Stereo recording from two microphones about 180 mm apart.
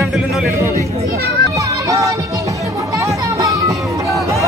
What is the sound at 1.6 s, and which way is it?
Music, 20° right (ahead or behind).